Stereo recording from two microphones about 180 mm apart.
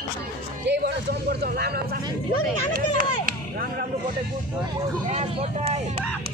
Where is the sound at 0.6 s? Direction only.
65° right (ahead or behind).